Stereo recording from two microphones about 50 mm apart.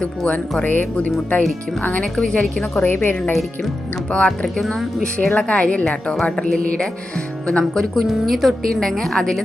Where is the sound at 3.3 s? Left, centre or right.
Centre.